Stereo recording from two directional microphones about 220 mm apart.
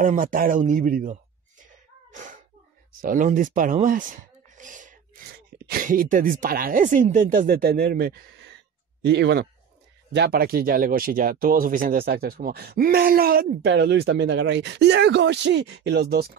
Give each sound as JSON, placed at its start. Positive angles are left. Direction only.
{"t": 0.0, "sound": "speech", "side_deg": -35}
{"t": 1.7, "sound": "sneeze", "side_deg": -35}
{"t": 3.0, "sound": "speech", "side_deg": -40}